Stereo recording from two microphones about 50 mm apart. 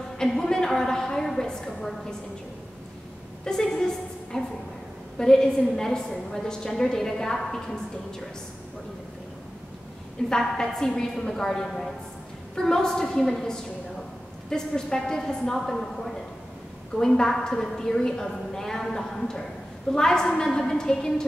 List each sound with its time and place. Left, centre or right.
0.2 s a woman's voice: centre
3.4 s a woman's voice: centre
10.3 s a woman's voice: centre